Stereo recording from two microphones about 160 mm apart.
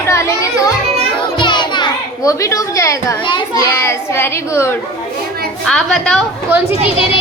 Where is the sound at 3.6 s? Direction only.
15° left (ahead or behind).